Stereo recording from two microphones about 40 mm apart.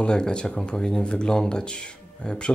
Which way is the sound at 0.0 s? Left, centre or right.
Left.